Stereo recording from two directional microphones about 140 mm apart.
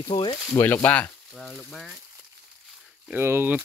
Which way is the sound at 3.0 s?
15° right (ahead or behind).